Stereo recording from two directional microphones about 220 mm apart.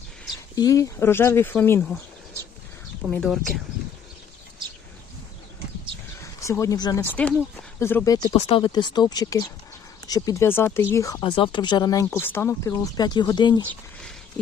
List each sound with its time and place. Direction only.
0.5 s speech: 15° left (ahead or behind)
3.1 s speech: centre (ahead or behind)
6.4 s speech: 15° left (ahead or behind)